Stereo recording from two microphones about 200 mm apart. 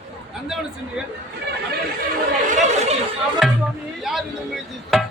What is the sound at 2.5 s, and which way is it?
Chatter, 35° right (ahead or behind).